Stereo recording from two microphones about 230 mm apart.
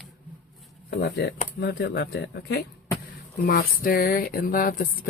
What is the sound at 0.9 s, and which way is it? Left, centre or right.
Speech, left.